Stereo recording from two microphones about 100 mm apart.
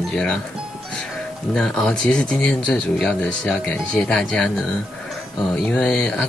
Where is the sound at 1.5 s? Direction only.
5° left (ahead or behind).